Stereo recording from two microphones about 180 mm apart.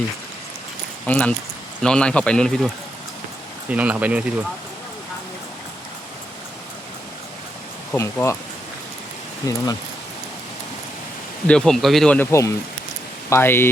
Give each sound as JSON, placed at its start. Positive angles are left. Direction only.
{"t": 1.0, "sound": "speech", "side_deg": 10}
{"t": 7.9, "sound": "speech", "side_deg": 15}
{"t": 9.4, "sound": "speech", "side_deg": 20}
{"t": 11.4, "sound": "speech", "side_deg": 5}